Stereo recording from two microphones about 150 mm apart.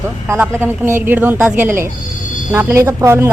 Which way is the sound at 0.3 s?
15° right (ahead or behind).